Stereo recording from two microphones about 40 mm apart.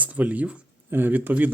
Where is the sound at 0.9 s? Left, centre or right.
Right.